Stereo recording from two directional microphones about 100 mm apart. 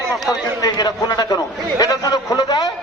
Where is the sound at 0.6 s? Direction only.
45° left (ahead or behind).